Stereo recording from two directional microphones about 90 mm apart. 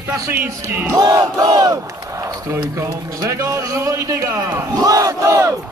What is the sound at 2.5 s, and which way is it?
Speech, 35° right (ahead or behind).